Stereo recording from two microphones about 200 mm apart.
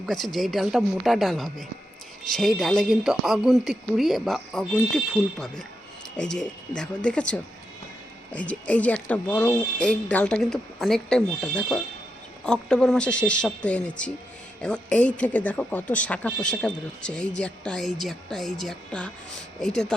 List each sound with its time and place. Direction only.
0.0 s speech: centre (ahead or behind)